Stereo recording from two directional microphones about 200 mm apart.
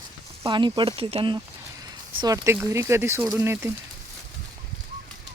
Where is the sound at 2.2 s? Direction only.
15° right (ahead or behind).